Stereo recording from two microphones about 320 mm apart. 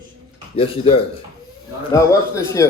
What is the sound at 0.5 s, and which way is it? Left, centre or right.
A man's voice, centre.